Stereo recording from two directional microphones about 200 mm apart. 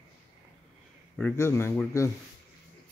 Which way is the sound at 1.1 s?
10° left (ahead or behind).